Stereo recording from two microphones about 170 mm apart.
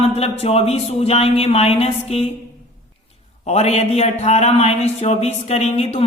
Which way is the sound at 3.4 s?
40° left (ahead or behind).